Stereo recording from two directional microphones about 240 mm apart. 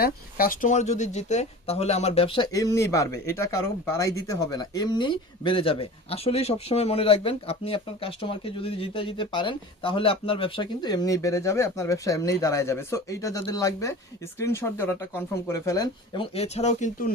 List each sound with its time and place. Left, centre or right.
0.0 s speech: left